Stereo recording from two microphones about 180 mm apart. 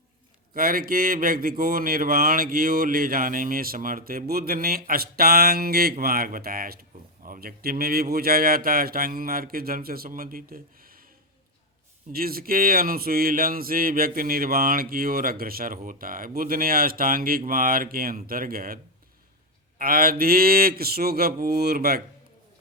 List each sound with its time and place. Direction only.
0.5 s speech: 50° right (ahead or behind)
12.1 s speech: 55° right (ahead or behind)
19.8 s speech: 55° right (ahead or behind)